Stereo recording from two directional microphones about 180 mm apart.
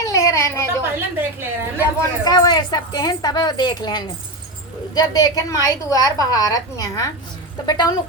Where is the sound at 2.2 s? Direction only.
20° left (ahead or behind).